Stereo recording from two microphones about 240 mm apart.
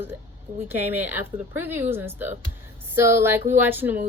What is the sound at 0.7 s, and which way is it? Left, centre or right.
A woman's voice, centre.